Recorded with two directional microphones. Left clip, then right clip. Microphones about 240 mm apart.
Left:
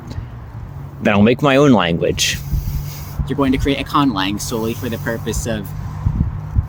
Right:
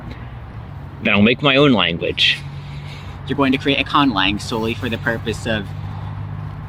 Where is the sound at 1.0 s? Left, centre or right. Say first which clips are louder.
Left 1 dB; left.